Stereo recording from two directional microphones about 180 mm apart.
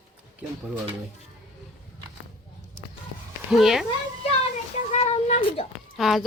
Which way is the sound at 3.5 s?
Centre (ahead or behind).